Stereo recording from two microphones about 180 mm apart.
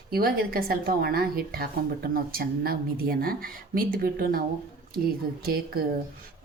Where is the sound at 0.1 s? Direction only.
55° right (ahead or behind).